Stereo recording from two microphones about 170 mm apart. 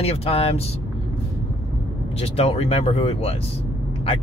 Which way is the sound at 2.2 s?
35° left (ahead or behind).